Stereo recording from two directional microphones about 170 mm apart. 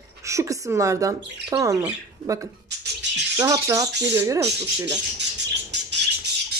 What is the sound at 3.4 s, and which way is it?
A woman's voice, 20° right (ahead or behind).